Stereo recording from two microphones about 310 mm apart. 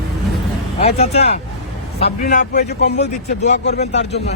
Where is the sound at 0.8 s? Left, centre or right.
Centre.